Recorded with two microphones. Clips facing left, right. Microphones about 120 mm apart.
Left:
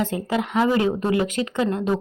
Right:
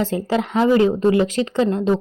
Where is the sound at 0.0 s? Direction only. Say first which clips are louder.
Right 3 dB; 30° right (ahead or behind).